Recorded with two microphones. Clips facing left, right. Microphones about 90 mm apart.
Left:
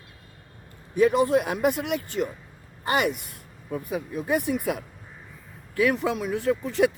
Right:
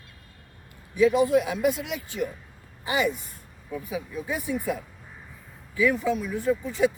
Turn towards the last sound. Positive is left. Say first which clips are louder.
# left 1 dB
turn(degrees=75)  # may be behind; listen again after turning